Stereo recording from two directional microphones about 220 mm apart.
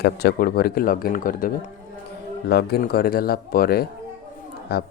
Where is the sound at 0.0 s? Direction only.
45° left (ahead or behind).